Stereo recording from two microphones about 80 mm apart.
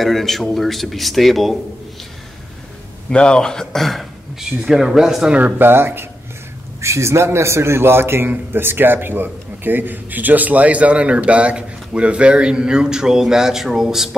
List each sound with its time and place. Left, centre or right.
0.0 s speech: centre
3.1 s a man's voice: centre
5.4 s a man's voice: right; by 14.1 s centre